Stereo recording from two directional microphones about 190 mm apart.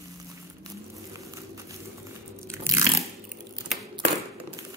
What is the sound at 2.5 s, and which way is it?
Crunch, 15° right (ahead or behind).